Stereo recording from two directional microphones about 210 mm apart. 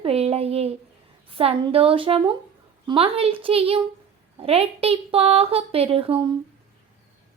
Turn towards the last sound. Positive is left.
turn(degrees=-25)  # may be behind; listen again after turning